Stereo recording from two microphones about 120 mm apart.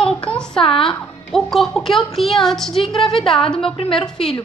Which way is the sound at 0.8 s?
Centre (ahead or behind).